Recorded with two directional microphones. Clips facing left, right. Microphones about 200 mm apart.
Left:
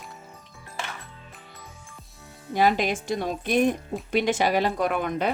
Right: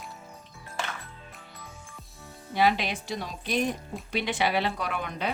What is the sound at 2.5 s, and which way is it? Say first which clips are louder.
Speech: left 3 dB; 45° left (ahead or behind).